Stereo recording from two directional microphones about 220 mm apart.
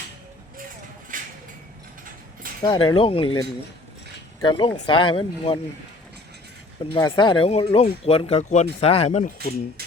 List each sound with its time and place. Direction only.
1.1 s a sound: 40° right (ahead or behind)
2.6 s speech: 20° left (ahead or behind)
4.4 s speech: 20° left (ahead or behind)
6.9 s speech: 20° left (ahead or behind)